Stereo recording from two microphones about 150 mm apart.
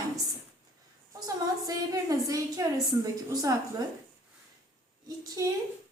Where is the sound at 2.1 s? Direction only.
25° right (ahead or behind).